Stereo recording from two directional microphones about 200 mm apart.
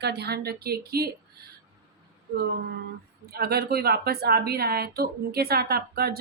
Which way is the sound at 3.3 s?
50° right (ahead or behind).